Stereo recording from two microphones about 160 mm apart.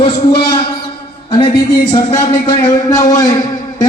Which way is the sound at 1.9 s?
30° left (ahead or behind).